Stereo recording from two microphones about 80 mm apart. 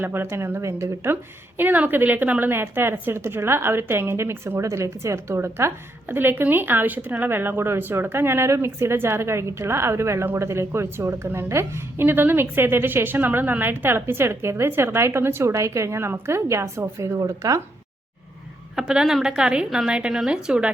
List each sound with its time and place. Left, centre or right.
0.0 s a woman's voice: right
1.1 s a woman's voice: right
18.8 s a woman's voice: centre